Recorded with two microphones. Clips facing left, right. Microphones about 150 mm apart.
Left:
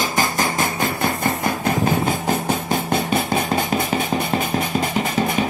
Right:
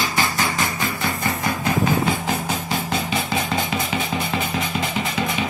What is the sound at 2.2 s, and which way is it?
Music, 50° left (ahead or behind).